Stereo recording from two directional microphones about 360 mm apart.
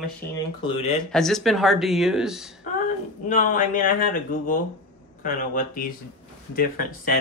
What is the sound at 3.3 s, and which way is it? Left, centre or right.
Speech, left.